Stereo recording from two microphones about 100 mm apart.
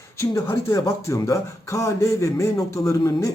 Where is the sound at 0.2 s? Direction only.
30° left (ahead or behind).